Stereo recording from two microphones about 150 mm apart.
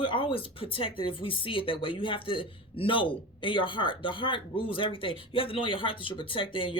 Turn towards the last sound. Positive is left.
turn(degrees=35)  # may be behind; listen again after turning